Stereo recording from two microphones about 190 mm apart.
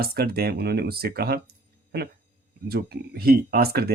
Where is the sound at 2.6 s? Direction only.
55° right (ahead or behind).